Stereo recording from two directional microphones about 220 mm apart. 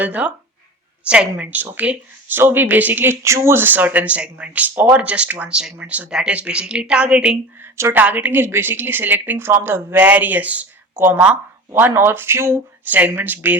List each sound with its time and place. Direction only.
0.0 s speech: 5° right (ahead or behind)